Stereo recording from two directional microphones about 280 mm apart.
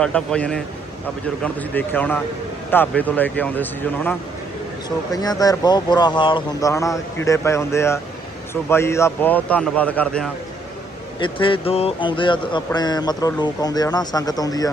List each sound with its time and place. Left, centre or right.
0.0 s a man's voice: centre
11.2 s speech: centre